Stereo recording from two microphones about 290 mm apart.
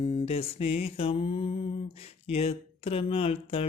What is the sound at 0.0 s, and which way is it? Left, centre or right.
Speech, left.